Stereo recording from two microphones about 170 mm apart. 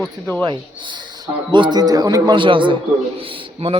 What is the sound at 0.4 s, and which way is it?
A man's voice, 25° right (ahead or behind).